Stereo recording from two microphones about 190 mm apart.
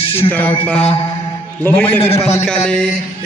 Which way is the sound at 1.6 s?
10° left (ahead or behind).